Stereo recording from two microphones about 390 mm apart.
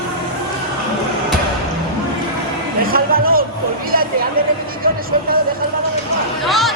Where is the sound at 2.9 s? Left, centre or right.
Right.